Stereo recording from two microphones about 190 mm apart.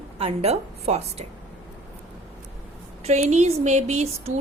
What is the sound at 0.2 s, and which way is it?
A woman's voice, 30° right (ahead or behind).